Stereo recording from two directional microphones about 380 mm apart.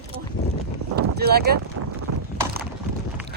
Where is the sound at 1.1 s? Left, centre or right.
Right.